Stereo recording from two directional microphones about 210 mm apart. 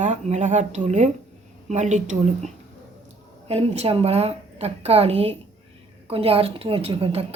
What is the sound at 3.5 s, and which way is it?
A woman's voice, 30° right (ahead or behind).